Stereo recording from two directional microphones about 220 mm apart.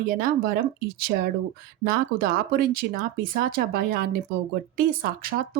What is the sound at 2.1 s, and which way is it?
Speech, 45° right (ahead or behind).